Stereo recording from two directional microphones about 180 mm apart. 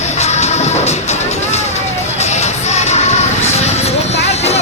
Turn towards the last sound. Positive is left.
turn(degrees=35)  # may be behind; listen again after turning